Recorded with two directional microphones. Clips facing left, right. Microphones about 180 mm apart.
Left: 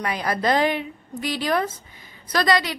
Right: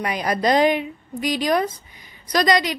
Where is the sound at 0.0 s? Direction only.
15° right (ahead or behind).